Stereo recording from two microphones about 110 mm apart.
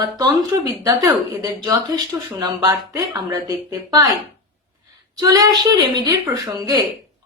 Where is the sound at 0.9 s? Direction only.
35° right (ahead or behind).